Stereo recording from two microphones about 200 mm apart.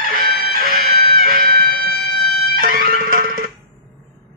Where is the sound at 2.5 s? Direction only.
45° right (ahead or behind).